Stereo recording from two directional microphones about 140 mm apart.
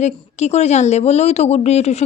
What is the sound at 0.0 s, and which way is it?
Speech, 55° left (ahead or behind).